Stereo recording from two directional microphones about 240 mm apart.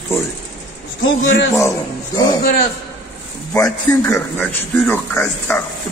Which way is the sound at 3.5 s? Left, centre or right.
Centre.